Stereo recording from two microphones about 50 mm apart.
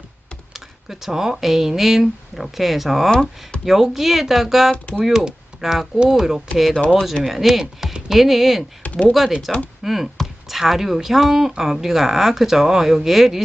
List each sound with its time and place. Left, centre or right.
0.5 s a woman's voice: centre
8.8 s speech: left
9.5 s a woman's voice: centre